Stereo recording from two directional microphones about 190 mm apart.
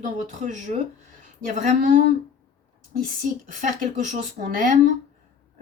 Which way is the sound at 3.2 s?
45° right (ahead or behind).